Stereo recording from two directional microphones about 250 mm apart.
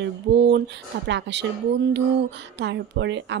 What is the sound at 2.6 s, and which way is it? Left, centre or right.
Speech, right.